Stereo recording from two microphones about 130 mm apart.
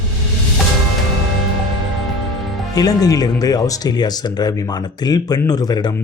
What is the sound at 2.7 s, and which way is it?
Speech, 30° left (ahead or behind).